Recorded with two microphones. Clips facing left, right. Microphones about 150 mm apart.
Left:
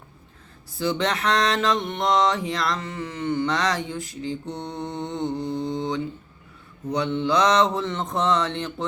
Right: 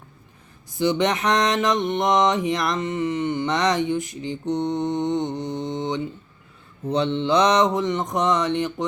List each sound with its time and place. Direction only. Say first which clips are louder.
0.7 s mantra: right 4 dB; 20° right (ahead or behind)